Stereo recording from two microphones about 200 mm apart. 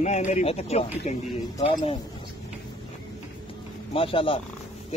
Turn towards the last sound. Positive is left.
turn(degrees=25)  # may be behind; listen again after turning